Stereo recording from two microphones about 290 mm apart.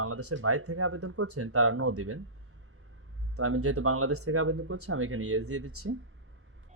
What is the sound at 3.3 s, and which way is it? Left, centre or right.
Speech, right.